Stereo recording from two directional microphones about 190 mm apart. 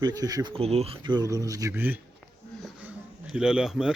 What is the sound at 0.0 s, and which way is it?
Speech, 20° right (ahead or behind).